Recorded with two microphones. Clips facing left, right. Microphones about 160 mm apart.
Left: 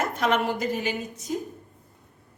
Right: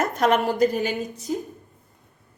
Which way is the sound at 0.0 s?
40° right (ahead or behind).